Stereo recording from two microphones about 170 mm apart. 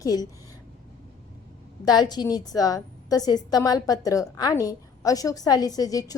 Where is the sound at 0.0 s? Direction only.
20° left (ahead or behind).